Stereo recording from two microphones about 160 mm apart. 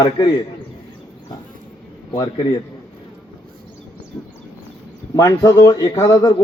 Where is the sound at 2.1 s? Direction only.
25° left (ahead or behind).